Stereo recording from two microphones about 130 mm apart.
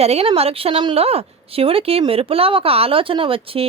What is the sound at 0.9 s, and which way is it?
A woman's voice, 50° right (ahead or behind).